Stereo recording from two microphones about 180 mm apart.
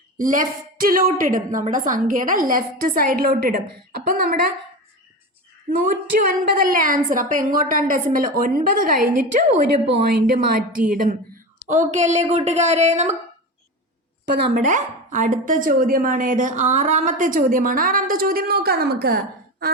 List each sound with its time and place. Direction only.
0.2 s a woman's voice: 50° right (ahead or behind)
5.9 s a woman's voice: 55° right (ahead or behind)
9.8 s a woman's voice: 65° right (ahead or behind)
11.7 s speech: 40° right (ahead or behind)
14.6 s a woman's voice: 45° right (ahead or behind)